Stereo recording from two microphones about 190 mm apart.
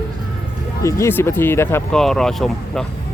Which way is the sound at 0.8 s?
15° left (ahead or behind).